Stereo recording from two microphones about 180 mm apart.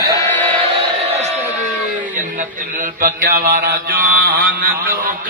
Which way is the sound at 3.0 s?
50° right (ahead or behind).